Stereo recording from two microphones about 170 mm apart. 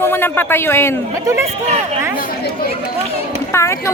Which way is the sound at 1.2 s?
15° right (ahead or behind).